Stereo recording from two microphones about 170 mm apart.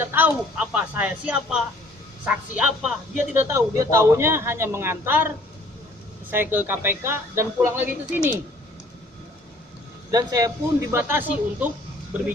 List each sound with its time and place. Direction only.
0.0 s speech: 10° right (ahead or behind)
6.3 s speech: 10° right (ahead or behind)
10.1 s speech: 20° right (ahead or behind)